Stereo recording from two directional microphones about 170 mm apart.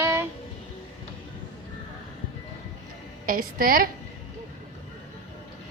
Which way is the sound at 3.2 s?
55° right (ahead or behind).